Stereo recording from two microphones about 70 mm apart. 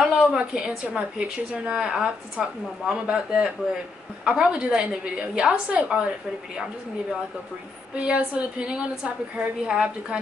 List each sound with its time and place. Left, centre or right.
0.0 s a man's voice: centre
7.9 s a man's voice: centre